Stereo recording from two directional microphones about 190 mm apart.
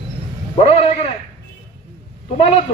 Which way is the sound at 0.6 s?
35° left (ahead or behind).